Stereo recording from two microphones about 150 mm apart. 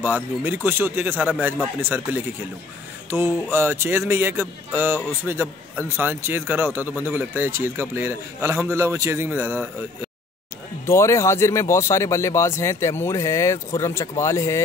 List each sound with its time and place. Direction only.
0.0 s speech: 15° right (ahead or behind)
3.5 s speech: 15° right (ahead or behind)
10.9 s speech: 20° left (ahead or behind)